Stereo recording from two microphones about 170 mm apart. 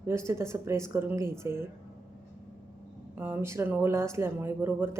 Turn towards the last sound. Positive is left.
turn(degrees=-15)  # may be behind; listen again after turning